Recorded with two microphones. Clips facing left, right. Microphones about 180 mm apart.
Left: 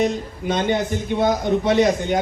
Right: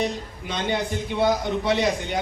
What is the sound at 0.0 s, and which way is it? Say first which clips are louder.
A man's voice: left 6 dB; 45° left (ahead or behind).